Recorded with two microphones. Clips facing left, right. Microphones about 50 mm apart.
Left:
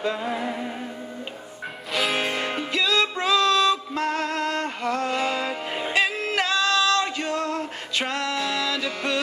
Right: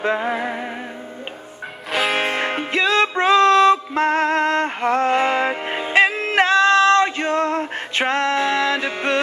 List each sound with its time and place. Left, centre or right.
0.0 s music: right
1.9 s music: centre
2.1 s music: right